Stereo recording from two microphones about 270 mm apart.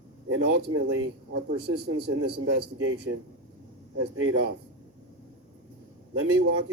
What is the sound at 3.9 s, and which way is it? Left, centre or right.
Speech, right.